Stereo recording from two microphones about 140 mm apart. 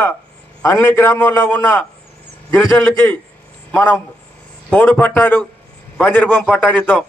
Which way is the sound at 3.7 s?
15° left (ahead or behind).